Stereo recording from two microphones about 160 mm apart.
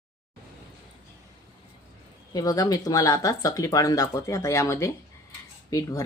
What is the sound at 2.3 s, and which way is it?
Speech, 25° left (ahead or behind).